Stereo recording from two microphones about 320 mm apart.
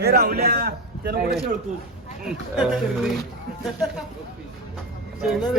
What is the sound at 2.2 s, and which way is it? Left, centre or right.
Speech, centre.